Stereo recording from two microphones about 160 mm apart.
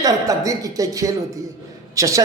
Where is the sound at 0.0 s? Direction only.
20° right (ahead or behind).